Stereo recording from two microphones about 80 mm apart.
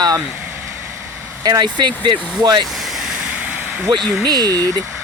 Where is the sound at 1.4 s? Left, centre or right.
Right.